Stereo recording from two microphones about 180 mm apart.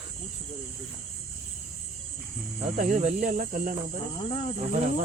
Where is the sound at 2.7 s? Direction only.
45° right (ahead or behind).